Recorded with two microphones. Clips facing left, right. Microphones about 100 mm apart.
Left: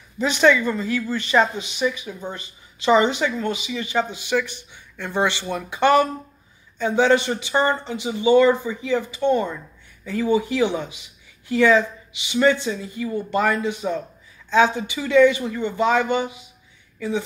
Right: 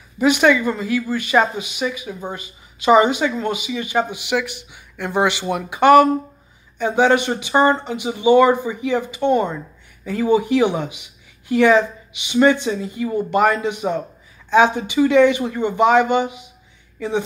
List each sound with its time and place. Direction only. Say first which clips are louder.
0.2 s a woman's voice: right 3 dB; 10° right (ahead or behind)